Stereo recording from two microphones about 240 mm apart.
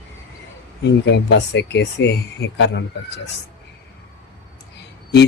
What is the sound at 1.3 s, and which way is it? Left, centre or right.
Mantra, left.